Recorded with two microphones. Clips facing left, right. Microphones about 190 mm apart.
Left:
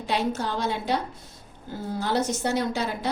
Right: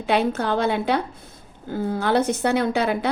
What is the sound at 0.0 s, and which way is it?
A woman's voice, 60° right (ahead or behind).